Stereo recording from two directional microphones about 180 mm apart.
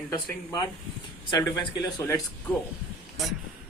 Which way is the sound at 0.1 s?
25° left (ahead or behind).